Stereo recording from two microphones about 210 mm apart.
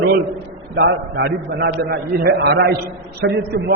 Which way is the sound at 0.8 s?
55° right (ahead or behind).